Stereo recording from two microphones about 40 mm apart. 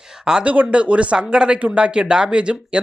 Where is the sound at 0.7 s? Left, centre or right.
Right.